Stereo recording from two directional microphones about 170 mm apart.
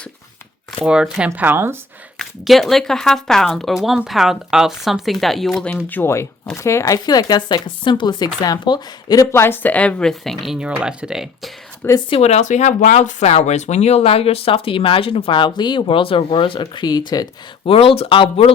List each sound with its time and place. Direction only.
0.9 s speech: 5° right (ahead or behind)
2.1 s speech: centre (ahead or behind)
11.9 s speech: 35° left (ahead or behind)